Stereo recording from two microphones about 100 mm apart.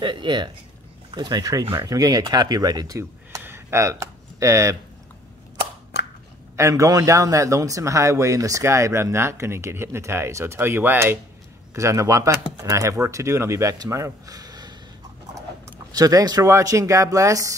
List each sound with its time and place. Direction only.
0.0 s speech: 50° right (ahead or behind); by 3.4 s 35° right (ahead or behind)
3.4 s a sound: 25° right (ahead or behind)
6.5 s a man's voice: 30° right (ahead or behind)
15.9 s speech: 40° right (ahead or behind)